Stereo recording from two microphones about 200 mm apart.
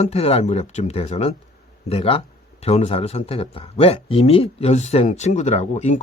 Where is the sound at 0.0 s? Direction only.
30° left (ahead or behind).